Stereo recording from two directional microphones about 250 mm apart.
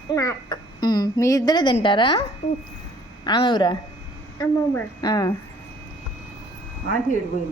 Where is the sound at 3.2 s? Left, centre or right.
Centre.